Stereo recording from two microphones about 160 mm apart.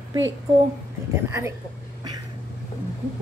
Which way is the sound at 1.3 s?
20° right (ahead or behind).